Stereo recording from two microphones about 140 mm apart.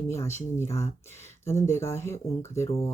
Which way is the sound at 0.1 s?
20° left (ahead or behind).